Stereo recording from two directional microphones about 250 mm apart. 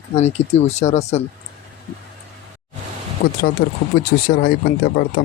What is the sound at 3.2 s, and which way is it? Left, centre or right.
Speech, left.